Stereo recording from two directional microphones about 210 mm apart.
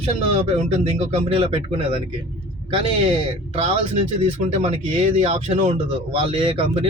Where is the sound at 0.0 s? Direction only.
30° right (ahead or behind).